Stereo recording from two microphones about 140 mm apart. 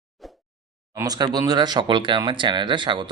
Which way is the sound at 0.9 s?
25° right (ahead or behind).